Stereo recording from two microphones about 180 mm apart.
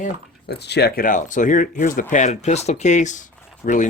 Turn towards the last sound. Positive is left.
turn(degrees=50)  # may be behind; listen again after turning